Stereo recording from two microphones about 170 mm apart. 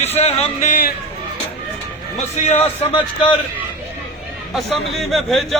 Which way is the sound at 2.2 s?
40° left (ahead or behind).